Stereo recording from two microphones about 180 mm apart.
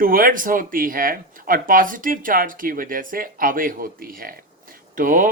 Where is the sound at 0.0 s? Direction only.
50° right (ahead or behind).